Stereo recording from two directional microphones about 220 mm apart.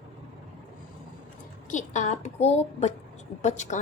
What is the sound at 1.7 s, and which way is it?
Speech, 35° left (ahead or behind).